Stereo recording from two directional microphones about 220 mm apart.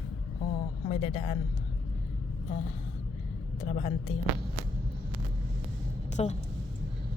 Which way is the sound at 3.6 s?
30° left (ahead or behind).